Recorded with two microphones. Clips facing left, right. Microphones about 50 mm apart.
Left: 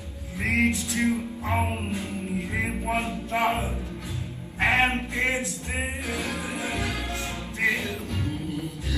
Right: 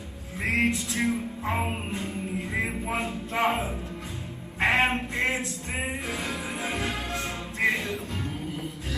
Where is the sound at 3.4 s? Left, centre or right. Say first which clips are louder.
Even; right.